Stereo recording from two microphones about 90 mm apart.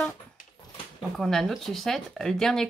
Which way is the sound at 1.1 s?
5° left (ahead or behind).